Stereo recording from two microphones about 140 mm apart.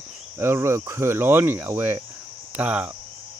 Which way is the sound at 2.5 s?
10° right (ahead or behind).